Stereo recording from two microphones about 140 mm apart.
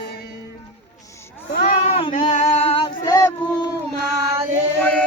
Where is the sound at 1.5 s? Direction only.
90° left.